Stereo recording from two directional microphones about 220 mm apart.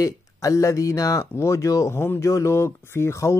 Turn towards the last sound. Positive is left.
turn(degrees=10)  # may be behind; listen again after turning